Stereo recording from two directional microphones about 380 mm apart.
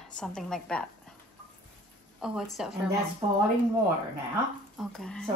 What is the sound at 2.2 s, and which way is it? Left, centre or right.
Speech, centre.